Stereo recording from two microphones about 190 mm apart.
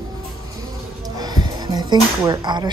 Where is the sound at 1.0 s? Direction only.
20° right (ahead or behind).